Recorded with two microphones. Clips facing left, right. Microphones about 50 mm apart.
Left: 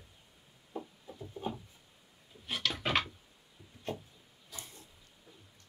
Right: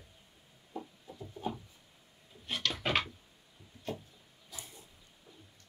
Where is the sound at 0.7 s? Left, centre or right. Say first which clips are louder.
Left 1 dB; left.